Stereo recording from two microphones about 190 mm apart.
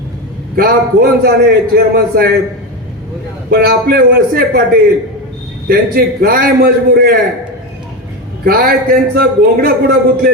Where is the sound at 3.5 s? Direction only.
55° right (ahead or behind).